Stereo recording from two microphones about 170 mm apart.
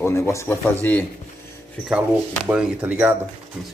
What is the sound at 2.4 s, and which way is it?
Speech, 5° right (ahead or behind).